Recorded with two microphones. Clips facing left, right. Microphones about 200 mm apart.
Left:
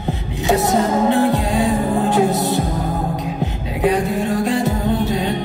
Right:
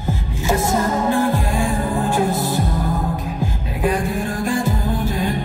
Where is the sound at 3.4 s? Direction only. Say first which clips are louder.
Left 2 dB; 20° left (ahead or behind).